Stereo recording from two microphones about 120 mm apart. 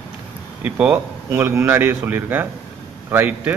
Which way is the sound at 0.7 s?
10° right (ahead or behind).